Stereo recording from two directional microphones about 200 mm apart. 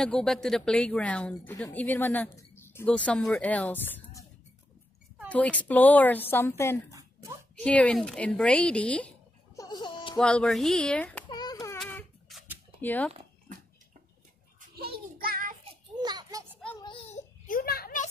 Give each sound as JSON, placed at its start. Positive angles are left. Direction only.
{"t": 0.0, "sound": "speech", "side_deg": 5}
{"t": 5.3, "sound": "speech", "side_deg": 5}
{"t": 6.9, "sound": "a sound", "side_deg": -15}
{"t": 7.5, "sound": "speech", "side_deg": 5}
{"t": 9.6, "sound": "a sound", "side_deg": 20}
{"t": 10.1, "sound": "speech", "side_deg": 5}
{"t": 11.2, "sound": "baby cry", "side_deg": 20}
{"t": 11.8, "sound": "a sound", "side_deg": 5}
{"t": 12.8, "sound": "speech", "side_deg": 10}
{"t": 14.8, "sound": "child singing", "side_deg": -50}
{"t": 16.0, "sound": "children playing", "side_deg": -20}
{"t": 16.8, "sound": "babbling", "side_deg": 30}
{"t": 17.5, "sound": "a sound", "side_deg": 45}